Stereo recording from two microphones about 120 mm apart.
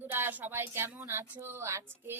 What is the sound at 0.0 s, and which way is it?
Speech, 15° right (ahead or behind).